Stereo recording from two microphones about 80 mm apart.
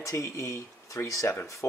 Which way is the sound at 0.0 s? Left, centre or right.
Left.